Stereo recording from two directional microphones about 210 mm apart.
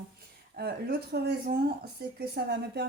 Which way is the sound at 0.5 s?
50° right (ahead or behind).